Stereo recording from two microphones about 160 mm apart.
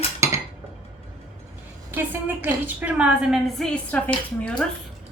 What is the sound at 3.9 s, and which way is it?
Speech, 10° left (ahead or behind).